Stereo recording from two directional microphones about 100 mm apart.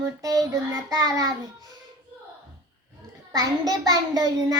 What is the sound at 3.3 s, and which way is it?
A child's voice, 40° right (ahead or behind).